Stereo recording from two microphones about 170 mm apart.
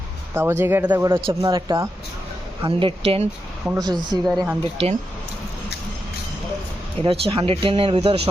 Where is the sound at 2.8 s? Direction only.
35° right (ahead or behind).